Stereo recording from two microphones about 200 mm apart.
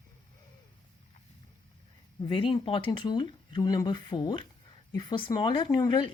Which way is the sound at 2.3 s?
25° left (ahead or behind).